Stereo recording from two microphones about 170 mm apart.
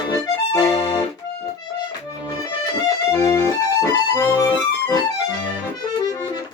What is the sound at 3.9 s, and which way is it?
Accordion, 20° left (ahead or behind).